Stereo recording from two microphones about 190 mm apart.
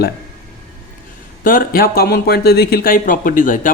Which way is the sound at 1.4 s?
50° left (ahead or behind).